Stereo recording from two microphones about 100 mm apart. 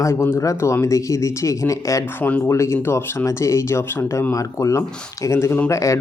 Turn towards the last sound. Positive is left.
turn(degrees=30)  # may be behind; listen again after turning